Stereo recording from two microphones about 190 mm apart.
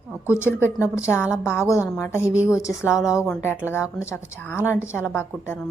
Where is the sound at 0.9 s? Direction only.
15° left (ahead or behind).